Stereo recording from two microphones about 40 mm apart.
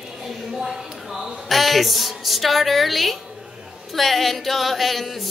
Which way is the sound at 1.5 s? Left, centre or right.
Centre.